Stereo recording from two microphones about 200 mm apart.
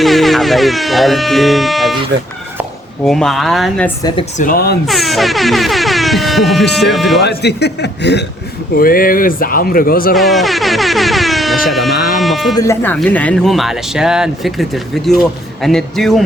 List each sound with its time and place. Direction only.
0.0 s speech: centre (ahead or behind)
3.0 s speech: 5° left (ahead or behind)
4.0 s speech: 25° left (ahead or behind)
4.4 s speech: 45° left (ahead or behind)
4.9 s speech: centre (ahead or behind)
7.2 s speech: 55° left (ahead or behind)
8.7 s speech: 45° left (ahead or behind)
10.2 s air horn: centre (ahead or behind)
11.9 s a sound: 50° left (ahead or behind)
12.2 s sheep: centre (ahead or behind)
12.5 s speech: 10° left (ahead or behind)